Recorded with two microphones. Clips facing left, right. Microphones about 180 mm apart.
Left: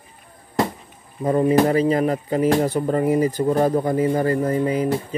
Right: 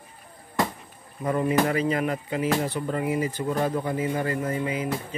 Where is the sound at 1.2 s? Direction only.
30° left (ahead or behind).